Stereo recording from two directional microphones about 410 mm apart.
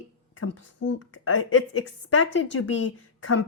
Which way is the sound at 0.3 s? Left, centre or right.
Left.